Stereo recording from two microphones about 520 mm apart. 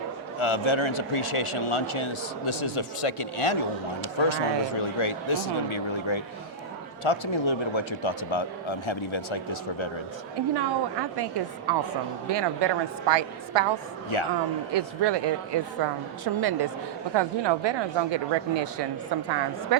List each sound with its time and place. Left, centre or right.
0.3 s a man's voice: left
10.5 s a woman's voice: right
14.1 s a man's voice: left
14.7 s a woman's voice: right